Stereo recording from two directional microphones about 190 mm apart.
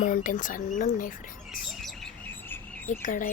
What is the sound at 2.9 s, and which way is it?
Speech, 45° left (ahead or behind).